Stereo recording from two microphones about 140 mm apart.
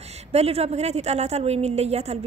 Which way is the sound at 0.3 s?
50° right (ahead or behind).